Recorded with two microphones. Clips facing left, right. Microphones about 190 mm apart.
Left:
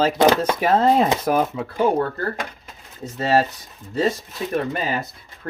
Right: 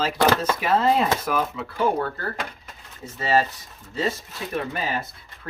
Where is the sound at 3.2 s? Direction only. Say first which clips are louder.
Left 3 dB; 60° left (ahead or behind).